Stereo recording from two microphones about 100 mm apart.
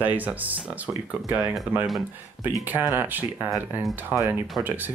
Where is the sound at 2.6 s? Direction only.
20° right (ahead or behind).